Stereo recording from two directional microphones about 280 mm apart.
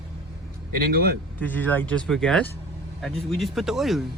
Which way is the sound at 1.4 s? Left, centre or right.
Centre.